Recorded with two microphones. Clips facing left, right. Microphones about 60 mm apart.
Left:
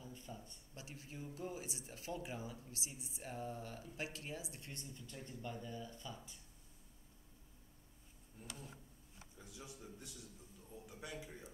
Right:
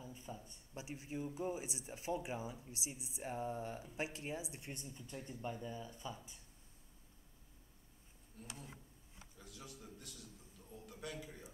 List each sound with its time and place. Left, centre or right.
0.0 s speech: centre
8.4 s speech: centre
9.7 s a sound: centre